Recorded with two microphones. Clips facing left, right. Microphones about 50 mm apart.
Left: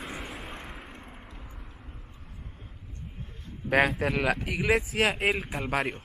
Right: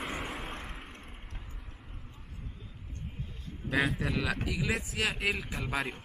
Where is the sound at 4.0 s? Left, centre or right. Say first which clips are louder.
Left 6 dB; left.